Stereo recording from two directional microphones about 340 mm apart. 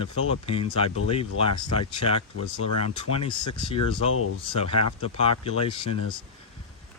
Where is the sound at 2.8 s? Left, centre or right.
Centre.